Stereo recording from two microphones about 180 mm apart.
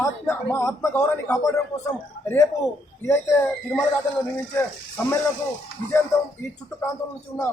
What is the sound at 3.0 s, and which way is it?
Speech, 10° left (ahead or behind).